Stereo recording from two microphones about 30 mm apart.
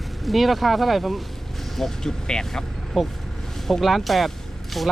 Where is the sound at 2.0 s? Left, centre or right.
Left.